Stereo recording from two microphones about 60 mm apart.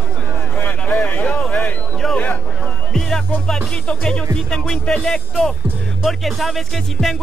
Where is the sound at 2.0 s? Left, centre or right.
Centre.